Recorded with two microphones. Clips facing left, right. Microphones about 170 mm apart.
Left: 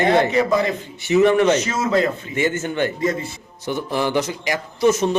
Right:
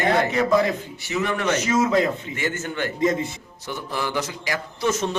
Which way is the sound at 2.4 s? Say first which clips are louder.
Left 10 dB; 20° left (ahead or behind).